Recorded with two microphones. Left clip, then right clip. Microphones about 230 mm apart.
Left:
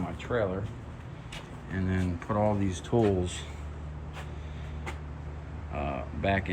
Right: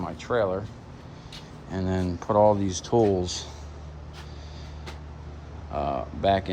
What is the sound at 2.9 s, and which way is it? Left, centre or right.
Speech, right.